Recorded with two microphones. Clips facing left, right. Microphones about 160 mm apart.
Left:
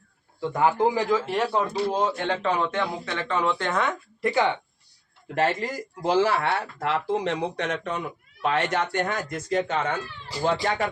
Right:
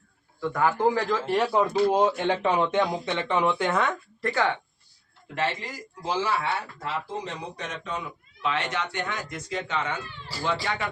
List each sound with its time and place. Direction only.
0.3 s speech: 25° left (ahead or behind)
1.1 s speech: centre (ahead or behind)
1.9 s speech: 15° right (ahead or behind)
4.2 s speech: 15° left (ahead or behind)
5.3 s speech: 45° left (ahead or behind)